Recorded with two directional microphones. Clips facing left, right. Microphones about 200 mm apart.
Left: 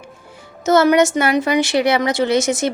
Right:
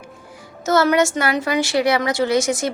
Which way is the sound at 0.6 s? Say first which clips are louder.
Left 3 dB; 20° left (ahead or behind).